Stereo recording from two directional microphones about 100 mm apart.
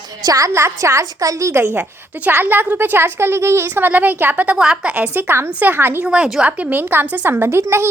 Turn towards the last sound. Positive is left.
turn(degrees=-25)  # may be behind; listen again after turning